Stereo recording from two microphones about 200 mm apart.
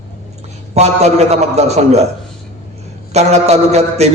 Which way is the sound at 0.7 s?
35° right (ahead or behind).